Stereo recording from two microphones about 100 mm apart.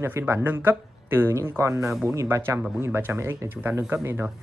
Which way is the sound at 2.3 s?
30° right (ahead or behind).